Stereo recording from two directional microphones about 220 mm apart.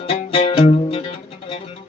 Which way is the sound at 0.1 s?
25° left (ahead or behind).